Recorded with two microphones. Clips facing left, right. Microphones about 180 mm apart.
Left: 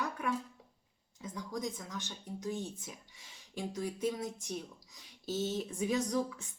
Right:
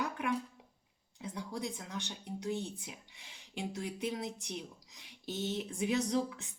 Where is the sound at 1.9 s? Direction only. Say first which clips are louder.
Right 1 dB; 15° right (ahead or behind).